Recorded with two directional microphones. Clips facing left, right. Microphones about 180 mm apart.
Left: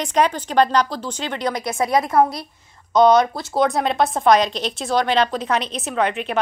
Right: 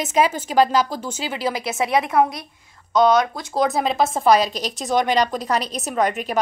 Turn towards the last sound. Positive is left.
turn(degrees=-5)  # may be behind; listen again after turning